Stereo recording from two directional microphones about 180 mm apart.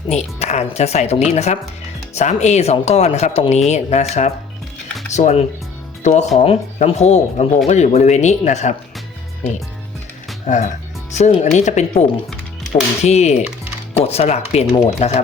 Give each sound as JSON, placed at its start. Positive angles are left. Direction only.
{"t": 0.1, "sound": "speech", "side_deg": 40}
{"t": 10.4, "sound": "speech", "side_deg": 40}
{"t": 12.3, "sound": "music", "side_deg": 0}
{"t": 13.1, "sound": "speech", "side_deg": 40}